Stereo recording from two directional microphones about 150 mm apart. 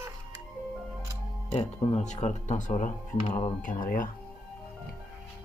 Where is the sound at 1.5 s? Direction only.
45° left (ahead or behind); by 4.1 s 70° left (ahead or behind).